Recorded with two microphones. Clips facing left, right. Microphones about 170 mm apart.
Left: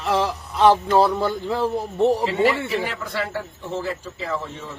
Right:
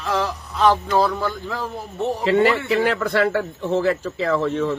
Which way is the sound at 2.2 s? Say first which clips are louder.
Right 3 dB; 70° right (ahead or behind).